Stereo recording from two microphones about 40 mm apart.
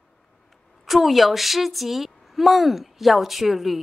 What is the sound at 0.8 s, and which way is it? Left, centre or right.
Speech, centre.